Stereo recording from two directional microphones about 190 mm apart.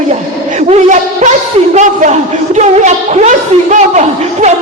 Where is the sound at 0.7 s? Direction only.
40° right (ahead or behind).